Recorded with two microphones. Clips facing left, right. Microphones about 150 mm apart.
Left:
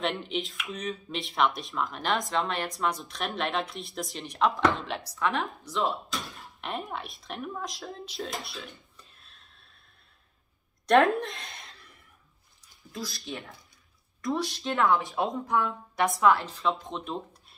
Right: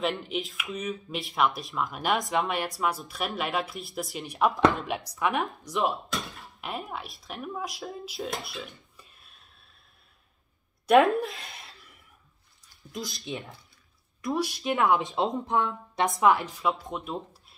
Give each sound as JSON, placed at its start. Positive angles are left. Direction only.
{"t": 0.0, "sound": "speech", "side_deg": -5}
{"t": 6.6, "sound": "speech", "side_deg": -5}
{"t": 10.9, "sound": "a woman's voice", "side_deg": -5}
{"t": 12.9, "sound": "speech", "side_deg": -20}